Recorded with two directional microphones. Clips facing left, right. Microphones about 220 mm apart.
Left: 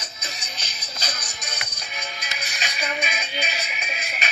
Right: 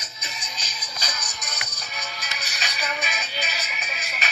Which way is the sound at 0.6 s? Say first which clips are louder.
Even; 30° left (ahead or behind).